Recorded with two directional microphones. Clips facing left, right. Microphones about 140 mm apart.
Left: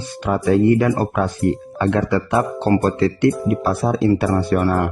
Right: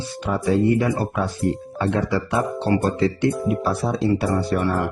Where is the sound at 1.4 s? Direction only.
65° left (ahead or behind); by 4.8 s 50° left (ahead or behind).